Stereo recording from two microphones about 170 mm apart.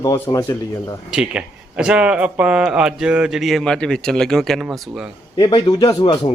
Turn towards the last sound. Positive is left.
turn(degrees=25)  # may be behind; listen again after turning